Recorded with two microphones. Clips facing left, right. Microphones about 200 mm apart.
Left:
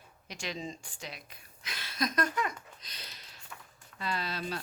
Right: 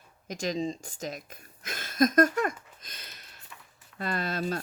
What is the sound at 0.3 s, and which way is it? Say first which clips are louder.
Speech: right 9 dB; 40° right (ahead or behind).